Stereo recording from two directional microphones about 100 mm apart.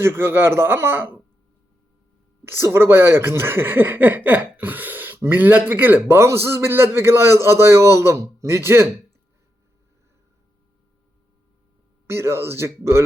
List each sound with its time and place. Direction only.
0.0 s speech: 25° right (ahead or behind)
2.4 s speech: 25° right (ahead or behind)
12.0 s speech: 25° right (ahead or behind)